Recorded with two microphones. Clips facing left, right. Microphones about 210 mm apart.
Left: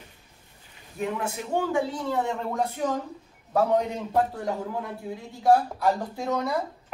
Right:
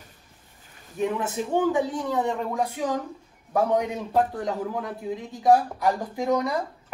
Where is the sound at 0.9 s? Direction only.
20° right (ahead or behind).